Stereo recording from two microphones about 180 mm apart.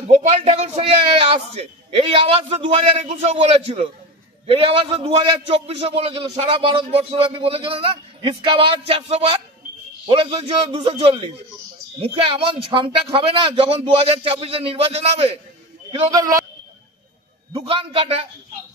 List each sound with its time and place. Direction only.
0.1 s a man's voice: 35° right (ahead or behind)
16.1 s a man's voice: 20° right (ahead or behind)
17.5 s a man's voice: 30° right (ahead or behind)